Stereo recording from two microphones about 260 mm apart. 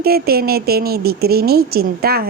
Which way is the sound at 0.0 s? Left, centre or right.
Right.